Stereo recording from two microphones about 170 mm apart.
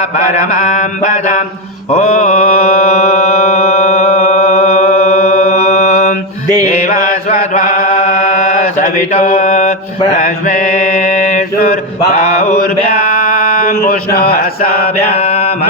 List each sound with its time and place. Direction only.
1.0 s mantra: 45° left (ahead or behind)
3.0 s music: 40° left (ahead or behind)
6.8 s chant: 50° left (ahead or behind)
9.2 s mantra: 50° left (ahead or behind)
13.7 s a sound: 60° left (ahead or behind)
14.6 s mantra: 65° left (ahead or behind)